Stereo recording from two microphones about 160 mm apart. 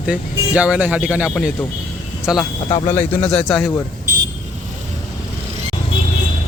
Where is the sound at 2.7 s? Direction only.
35° left (ahead or behind).